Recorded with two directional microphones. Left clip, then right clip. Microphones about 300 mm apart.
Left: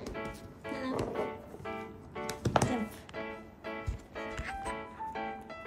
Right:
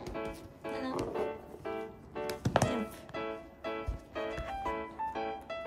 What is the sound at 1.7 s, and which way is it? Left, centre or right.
Music, centre.